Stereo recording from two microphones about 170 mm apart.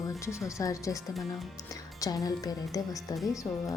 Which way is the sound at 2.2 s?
20° left (ahead or behind).